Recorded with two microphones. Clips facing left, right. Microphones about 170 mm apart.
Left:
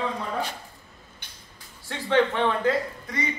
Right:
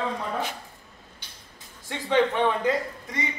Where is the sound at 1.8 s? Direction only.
15° right (ahead or behind).